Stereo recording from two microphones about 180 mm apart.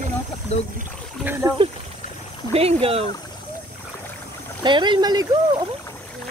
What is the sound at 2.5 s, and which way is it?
Speech, 35° right (ahead or behind).